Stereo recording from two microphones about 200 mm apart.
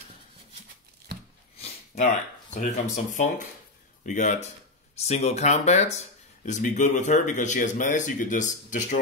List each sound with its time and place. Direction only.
1.6 s speech: 35° left (ahead or behind)